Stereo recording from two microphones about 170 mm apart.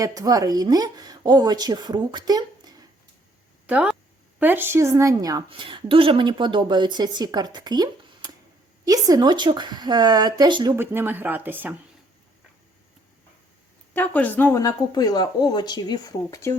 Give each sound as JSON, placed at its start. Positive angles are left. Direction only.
{"t": 0.0, "sound": "a woman's voice", "side_deg": -20}
{"t": 3.7, "sound": "a woman's voice", "side_deg": -10}
{"t": 10.8, "sound": "speech", "side_deg": -10}
{"t": 13.9, "sound": "speech", "side_deg": 10}